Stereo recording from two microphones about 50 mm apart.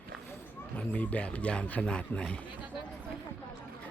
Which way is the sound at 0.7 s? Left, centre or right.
Left.